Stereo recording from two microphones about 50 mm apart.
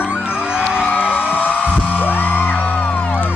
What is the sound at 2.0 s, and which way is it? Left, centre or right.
Music, left.